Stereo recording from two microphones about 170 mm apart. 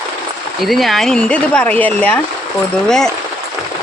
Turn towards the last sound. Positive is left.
turn(degrees=5)  # may be behind; listen again after turning